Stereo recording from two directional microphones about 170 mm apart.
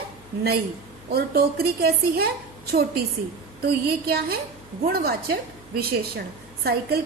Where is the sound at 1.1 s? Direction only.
65° right (ahead or behind).